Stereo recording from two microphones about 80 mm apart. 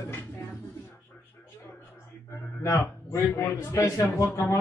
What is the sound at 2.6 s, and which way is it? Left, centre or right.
A man's voice, left.